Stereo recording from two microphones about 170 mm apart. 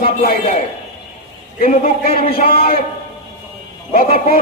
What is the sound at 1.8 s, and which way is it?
Speech, 35° left (ahead or behind).